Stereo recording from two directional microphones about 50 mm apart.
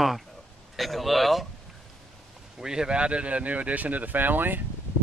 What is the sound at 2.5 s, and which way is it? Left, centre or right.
Speech, centre.